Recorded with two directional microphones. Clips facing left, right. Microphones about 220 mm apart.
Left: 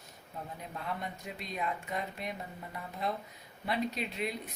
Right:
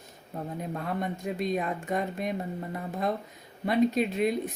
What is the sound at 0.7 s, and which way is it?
Speech, 50° right (ahead or behind).